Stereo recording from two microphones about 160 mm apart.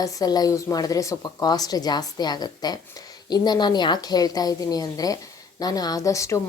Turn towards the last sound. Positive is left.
turn(degrees=20)  # may be behind; listen again after turning